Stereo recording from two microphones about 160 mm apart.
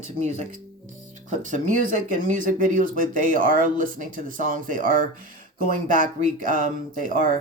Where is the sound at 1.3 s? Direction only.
50° right (ahead or behind).